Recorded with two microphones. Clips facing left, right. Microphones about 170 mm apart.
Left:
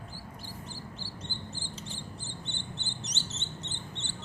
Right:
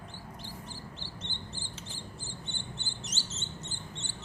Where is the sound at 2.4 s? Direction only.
20° left (ahead or behind).